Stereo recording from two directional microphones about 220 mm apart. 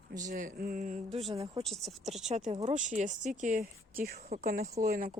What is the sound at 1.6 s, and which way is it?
Speech, centre (ahead or behind).